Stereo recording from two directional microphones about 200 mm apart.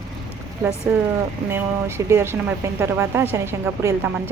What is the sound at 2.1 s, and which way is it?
Speech, 15° right (ahead or behind).